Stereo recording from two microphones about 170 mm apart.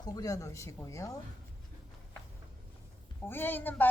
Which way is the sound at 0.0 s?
20° left (ahead or behind).